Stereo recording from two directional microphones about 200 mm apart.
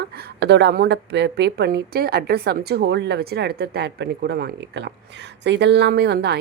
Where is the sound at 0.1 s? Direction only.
55° right (ahead or behind).